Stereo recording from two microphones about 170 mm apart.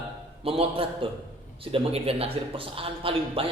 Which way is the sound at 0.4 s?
35° right (ahead or behind).